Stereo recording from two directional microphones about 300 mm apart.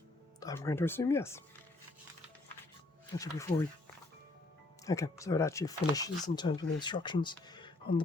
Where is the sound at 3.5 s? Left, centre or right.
Centre.